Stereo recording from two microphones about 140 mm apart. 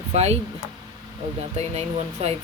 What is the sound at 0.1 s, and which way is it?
Speech, 50° right (ahead or behind).